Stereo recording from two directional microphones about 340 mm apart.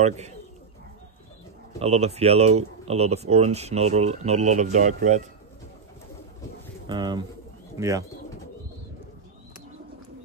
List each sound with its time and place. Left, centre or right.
0.0 s speech: centre
1.8 s speech: centre
6.9 s speech: centre